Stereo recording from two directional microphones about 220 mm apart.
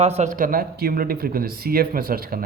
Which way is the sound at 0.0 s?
30° right (ahead or behind).